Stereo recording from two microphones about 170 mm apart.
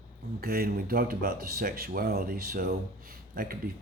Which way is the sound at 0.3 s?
60° right (ahead or behind).